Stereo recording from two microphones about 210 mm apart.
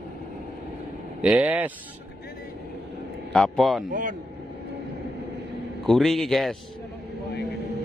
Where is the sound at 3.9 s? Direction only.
40° right (ahead or behind).